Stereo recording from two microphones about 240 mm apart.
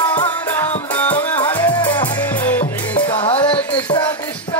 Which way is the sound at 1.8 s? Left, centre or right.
Centre.